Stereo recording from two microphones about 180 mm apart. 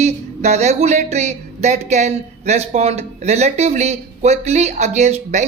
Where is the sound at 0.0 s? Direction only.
40° right (ahead or behind).